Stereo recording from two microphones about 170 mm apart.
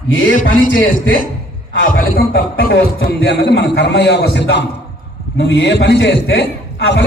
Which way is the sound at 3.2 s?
85° left.